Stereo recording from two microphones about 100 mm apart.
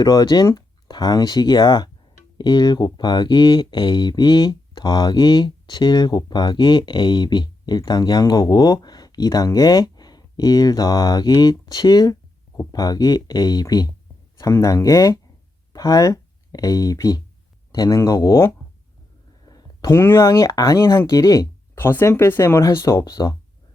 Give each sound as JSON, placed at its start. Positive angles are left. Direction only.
{"t": 0.0, "sound": "speech", "side_deg": 40}
{"t": 21.8, "sound": "speech", "side_deg": 25}